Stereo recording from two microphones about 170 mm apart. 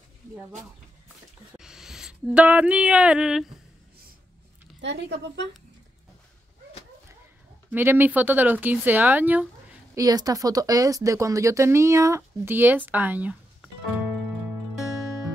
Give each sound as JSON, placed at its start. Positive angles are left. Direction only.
{"t": 1.6, "sound": "a sound", "side_deg": -5}
{"t": 4.8, "sound": "a woman's voice", "side_deg": -90}
{"t": 7.7, "sound": "speech", "side_deg": -10}
{"t": 9.9, "sound": "speech", "side_deg": -20}